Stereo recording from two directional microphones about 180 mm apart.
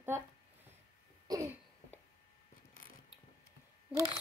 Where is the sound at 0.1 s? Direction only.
15° right (ahead or behind).